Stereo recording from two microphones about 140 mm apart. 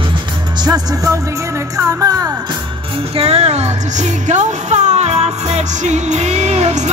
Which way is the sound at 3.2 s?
45° right (ahead or behind).